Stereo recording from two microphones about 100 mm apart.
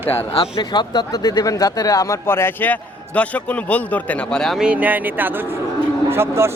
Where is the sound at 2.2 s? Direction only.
25° left (ahead or behind); by 4.5 s 5° left (ahead or behind).